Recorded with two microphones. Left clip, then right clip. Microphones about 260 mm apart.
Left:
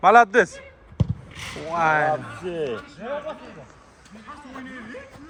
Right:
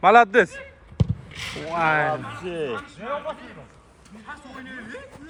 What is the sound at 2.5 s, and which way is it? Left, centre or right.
Speech, left.